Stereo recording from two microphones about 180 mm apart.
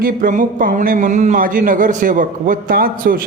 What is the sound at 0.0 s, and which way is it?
A man's voice, 50° right (ahead or behind).